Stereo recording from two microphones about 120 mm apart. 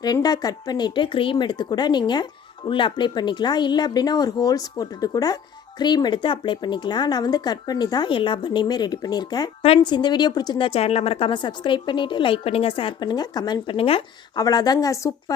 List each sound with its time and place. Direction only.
0.0 s speech: 35° left (ahead or behind)
9.6 s speech: 45° left (ahead or behind)
10.7 s a woman's voice: 55° left (ahead or behind); by 13.7 s 35° left (ahead or behind)
13.7 s a woman's voice: 50° left (ahead or behind)
14.3 s speech: 30° left (ahead or behind)